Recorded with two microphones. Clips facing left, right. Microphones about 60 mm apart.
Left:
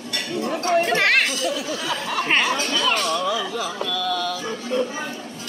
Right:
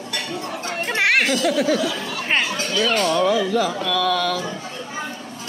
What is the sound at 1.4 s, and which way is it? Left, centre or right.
Speech, right.